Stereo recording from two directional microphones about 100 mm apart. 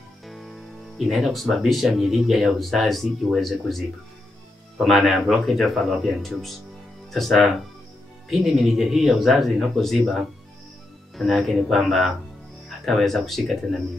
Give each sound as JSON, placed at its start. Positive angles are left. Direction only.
{"t": 0.3, "sound": "speech", "side_deg": 0}